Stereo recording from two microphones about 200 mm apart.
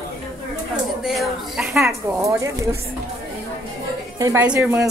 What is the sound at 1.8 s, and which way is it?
Speech, 15° right (ahead or behind).